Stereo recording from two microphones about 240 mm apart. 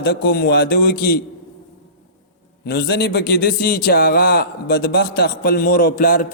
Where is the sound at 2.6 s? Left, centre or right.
Left.